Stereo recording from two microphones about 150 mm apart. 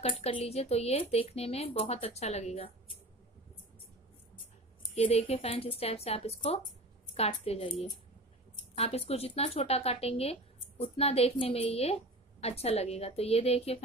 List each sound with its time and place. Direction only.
0.0 s speech: 40° left (ahead or behind)
4.9 s speech: 45° left (ahead or behind)